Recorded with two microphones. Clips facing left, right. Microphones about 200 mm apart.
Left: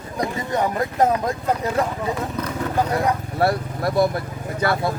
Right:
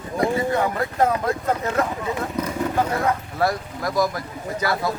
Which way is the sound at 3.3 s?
30° left (ahead or behind).